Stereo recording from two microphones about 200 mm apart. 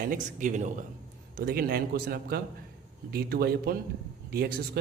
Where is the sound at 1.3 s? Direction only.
50° right (ahead or behind).